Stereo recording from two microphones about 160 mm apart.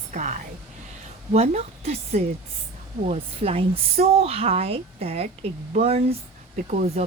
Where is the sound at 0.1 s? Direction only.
50° right (ahead or behind).